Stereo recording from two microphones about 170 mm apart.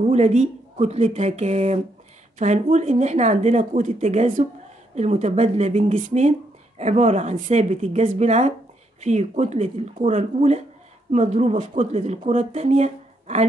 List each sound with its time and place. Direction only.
0.1 s speech: 40° right (ahead or behind)